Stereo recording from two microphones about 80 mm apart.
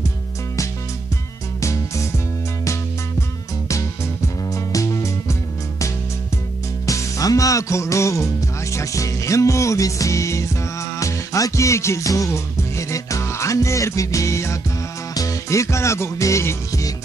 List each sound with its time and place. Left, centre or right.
1.6 s music: left
6.9 s music: left